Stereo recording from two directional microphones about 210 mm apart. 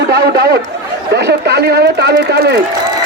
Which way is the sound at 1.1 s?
55° right (ahead or behind).